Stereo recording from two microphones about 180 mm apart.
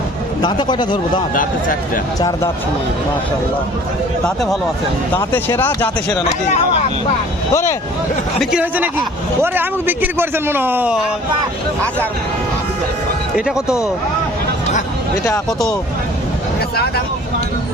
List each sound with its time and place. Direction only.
0.4 s speech: 25° left (ahead or behind)
5.1 s speech: 10° left (ahead or behind)
7.5 s speech: 15° left (ahead or behind)
8.4 s a man's voice: 5° right (ahead or behind)
13.3 s speech: 5° right (ahead or behind)